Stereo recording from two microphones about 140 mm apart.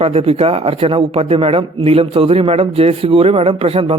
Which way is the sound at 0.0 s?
45° right (ahead or behind).